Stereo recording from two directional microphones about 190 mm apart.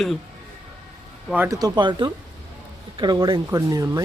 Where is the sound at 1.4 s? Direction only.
20° right (ahead or behind).